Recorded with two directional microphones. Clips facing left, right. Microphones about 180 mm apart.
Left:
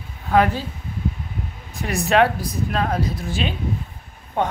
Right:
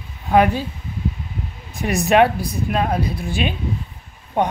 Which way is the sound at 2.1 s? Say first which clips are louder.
Right 2 dB; 15° right (ahead or behind).